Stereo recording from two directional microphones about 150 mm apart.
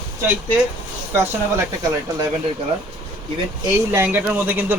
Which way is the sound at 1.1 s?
15° right (ahead or behind).